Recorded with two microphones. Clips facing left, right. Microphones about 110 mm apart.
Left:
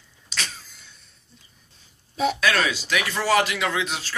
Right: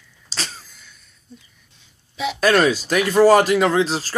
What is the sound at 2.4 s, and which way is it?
Speech, 45° right (ahead or behind).